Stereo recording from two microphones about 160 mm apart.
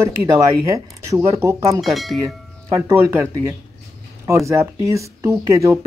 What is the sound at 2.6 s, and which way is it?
Speech, 20° right (ahead or behind).